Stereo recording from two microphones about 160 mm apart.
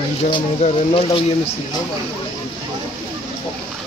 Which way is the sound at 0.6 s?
40° left (ahead or behind).